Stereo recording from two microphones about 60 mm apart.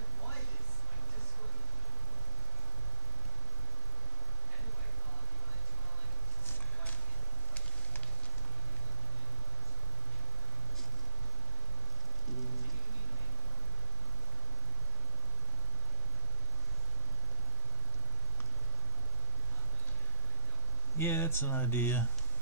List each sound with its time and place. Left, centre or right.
21.0 s speech: left